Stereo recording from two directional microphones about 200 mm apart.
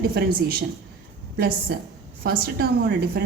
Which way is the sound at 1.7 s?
50° right (ahead or behind).